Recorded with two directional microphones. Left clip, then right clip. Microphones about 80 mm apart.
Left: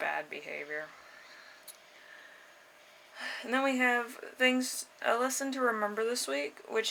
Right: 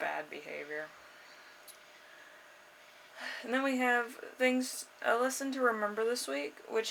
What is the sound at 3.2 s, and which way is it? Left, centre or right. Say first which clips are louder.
Speech: left 2 dB; left.